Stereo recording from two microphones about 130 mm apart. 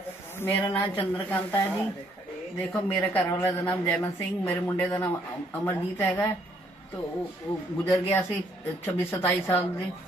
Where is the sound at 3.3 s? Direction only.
20° left (ahead or behind).